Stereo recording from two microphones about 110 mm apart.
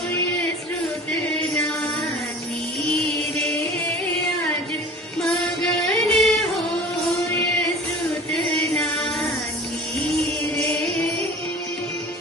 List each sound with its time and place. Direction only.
2.9 s music: 65° right (ahead or behind)
5.9 s music: 5° left (ahead or behind)
8.3 s music: 5° left (ahead or behind)